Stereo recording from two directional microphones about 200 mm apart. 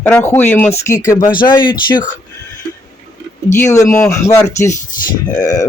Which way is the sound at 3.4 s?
15° left (ahead or behind).